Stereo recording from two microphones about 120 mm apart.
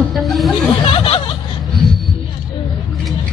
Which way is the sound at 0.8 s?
50° left (ahead or behind).